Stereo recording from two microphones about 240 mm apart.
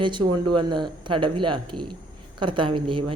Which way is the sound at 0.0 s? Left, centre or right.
Centre.